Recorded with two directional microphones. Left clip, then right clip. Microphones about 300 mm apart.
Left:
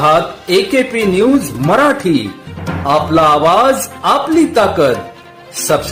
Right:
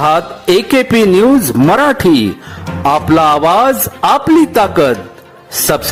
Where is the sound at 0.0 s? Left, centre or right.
Right.